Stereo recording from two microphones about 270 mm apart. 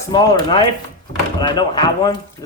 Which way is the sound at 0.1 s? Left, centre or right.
Centre.